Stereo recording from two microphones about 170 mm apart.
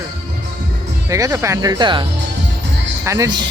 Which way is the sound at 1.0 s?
20° right (ahead or behind).